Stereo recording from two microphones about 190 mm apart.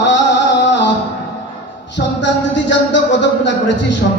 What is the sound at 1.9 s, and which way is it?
Music, 70° left (ahead or behind).